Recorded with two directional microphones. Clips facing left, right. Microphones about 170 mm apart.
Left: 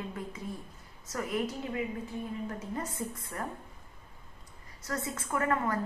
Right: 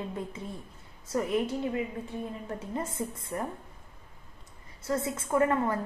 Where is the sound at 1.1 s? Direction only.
25° right (ahead or behind).